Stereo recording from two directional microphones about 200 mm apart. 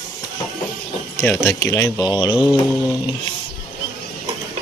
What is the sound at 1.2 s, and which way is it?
Speech, 10° left (ahead or behind).